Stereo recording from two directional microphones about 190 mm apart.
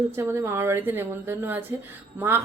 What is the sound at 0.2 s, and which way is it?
A woman's voice, 15° right (ahead or behind).